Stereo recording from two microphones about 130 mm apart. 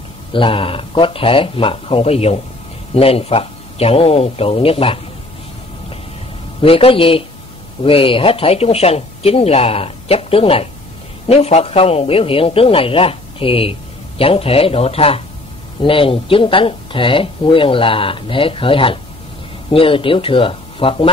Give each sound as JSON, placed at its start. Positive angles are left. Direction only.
{"t": 0.3, "sound": "a man's voice", "side_deg": 40}
{"t": 6.6, "sound": "a man's voice", "side_deg": 45}